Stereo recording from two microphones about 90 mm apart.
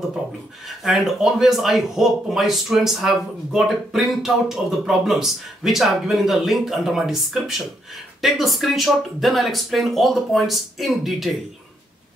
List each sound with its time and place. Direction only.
0.7 s speech: centre (ahead or behind)